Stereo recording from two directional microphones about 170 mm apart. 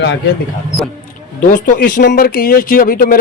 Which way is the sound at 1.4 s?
50° left (ahead or behind).